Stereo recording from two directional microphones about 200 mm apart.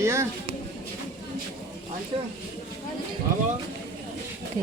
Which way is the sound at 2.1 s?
30° right (ahead or behind).